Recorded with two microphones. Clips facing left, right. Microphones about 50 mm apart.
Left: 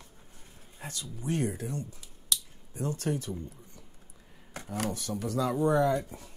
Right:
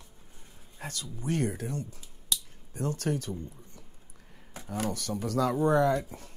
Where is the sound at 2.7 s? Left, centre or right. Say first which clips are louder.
Right 1 dB; right.